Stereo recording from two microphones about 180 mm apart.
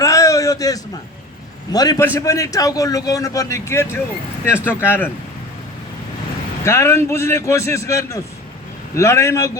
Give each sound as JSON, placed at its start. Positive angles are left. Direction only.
{"t": 0.0, "sound": "a sound", "side_deg": 15}
{"t": 1.7, "sound": "a man's voice", "side_deg": 20}
{"t": 6.7, "sound": "a man's voice", "side_deg": 15}